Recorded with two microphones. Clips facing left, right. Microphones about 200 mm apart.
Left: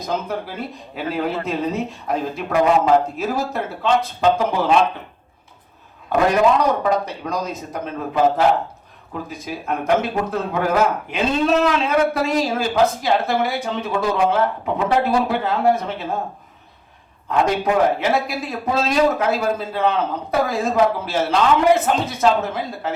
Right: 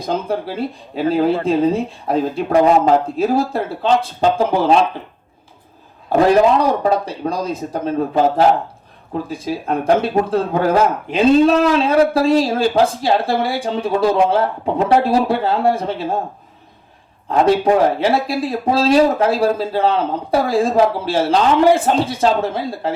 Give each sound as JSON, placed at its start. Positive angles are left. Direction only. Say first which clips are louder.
{"t": 0.0, "sound": "a man's voice", "louder": "right 4 dB", "side_deg": -30}
{"t": 6.1, "sound": "a man's voice", "louder": "right 4 dB", "side_deg": -30}
{"t": 17.2, "sound": "a man's voice", "louder": "right 5 dB", "side_deg": -35}